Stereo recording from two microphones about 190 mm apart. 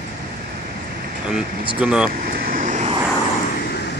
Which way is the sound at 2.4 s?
45° right (ahead or behind).